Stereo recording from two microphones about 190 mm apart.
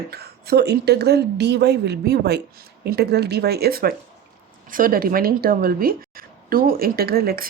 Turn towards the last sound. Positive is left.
turn(degrees=-50)  # may be behind; listen again after turning